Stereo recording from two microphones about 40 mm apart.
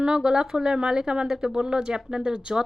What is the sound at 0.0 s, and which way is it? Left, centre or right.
Speech, centre.